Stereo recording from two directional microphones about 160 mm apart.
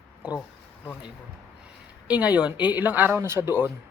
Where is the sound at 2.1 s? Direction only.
10° right (ahead or behind).